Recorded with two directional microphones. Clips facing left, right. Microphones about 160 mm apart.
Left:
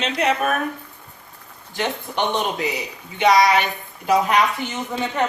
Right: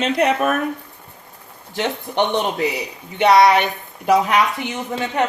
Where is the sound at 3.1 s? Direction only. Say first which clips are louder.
Right 3 dB; 60° right (ahead or behind).